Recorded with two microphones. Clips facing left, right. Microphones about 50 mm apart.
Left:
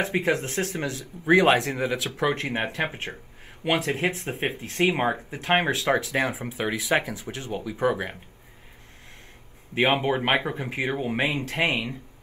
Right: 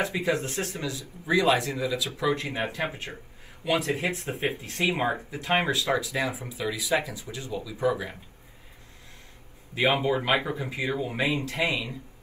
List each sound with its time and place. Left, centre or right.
0.0 s speech: left
9.8 s speech: left